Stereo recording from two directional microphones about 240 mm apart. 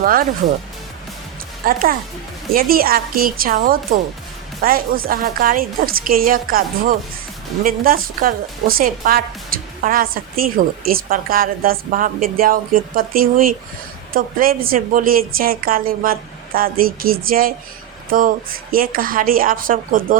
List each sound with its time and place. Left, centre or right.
0.0 s a woman's voice: right
1.6 s a woman's voice: right